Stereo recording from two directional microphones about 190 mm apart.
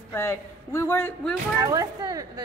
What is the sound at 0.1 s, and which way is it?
A man's voice, 15° left (ahead or behind).